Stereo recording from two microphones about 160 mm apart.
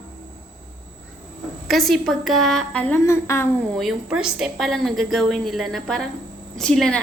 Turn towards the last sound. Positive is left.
turn(degrees=5)  # may be behind; listen again after turning